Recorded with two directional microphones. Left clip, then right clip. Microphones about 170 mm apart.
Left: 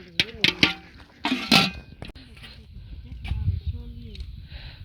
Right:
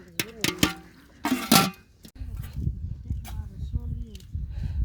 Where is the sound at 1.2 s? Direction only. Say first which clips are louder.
Left 2 dB; 10° right (ahead or behind).